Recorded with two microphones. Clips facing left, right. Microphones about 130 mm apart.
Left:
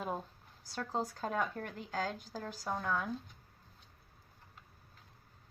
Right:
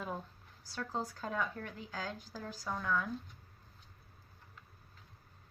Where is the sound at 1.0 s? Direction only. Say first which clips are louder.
Left 2 dB; 50° left (ahead or behind).